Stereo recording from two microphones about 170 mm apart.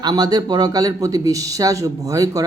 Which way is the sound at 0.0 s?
25° right (ahead or behind).